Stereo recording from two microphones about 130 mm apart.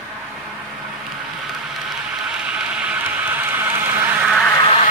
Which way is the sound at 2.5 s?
10° right (ahead or behind).